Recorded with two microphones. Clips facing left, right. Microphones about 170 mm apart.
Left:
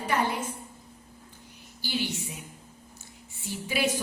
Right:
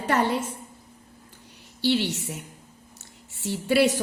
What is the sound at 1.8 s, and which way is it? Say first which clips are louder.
A woman's voice: right 8 dB; 75° right (ahead or behind).